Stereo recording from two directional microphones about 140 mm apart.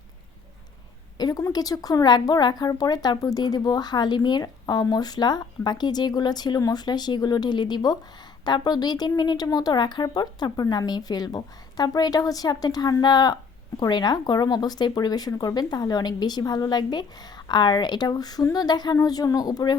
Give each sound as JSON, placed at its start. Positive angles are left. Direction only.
{"t": 1.2, "sound": "speech", "side_deg": 25}